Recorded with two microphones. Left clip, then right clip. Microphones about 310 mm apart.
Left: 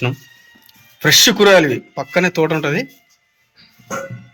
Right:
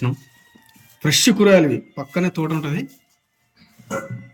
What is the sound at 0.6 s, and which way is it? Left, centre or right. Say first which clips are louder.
Speech: left 8 dB; centre.